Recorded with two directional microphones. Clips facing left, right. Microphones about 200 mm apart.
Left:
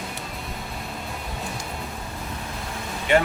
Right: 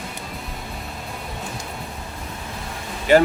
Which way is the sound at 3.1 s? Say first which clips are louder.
Right 5 dB; 40° right (ahead or behind).